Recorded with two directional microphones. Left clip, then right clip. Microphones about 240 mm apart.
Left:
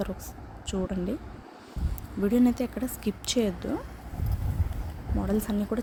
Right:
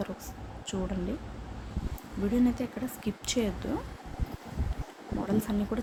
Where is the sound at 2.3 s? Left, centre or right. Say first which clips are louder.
Left 4 dB; left.